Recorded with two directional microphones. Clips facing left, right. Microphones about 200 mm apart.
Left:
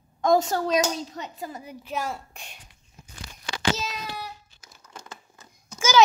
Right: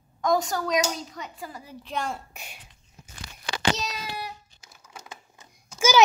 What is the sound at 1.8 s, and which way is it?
Speech, 5° left (ahead or behind).